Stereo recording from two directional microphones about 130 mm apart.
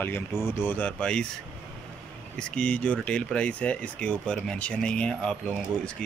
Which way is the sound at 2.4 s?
5° left (ahead or behind).